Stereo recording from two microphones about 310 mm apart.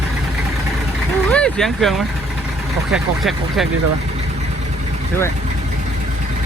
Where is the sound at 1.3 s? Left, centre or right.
Centre.